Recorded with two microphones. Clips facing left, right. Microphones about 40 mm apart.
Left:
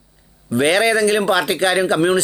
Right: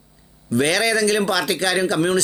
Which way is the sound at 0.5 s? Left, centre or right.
Left.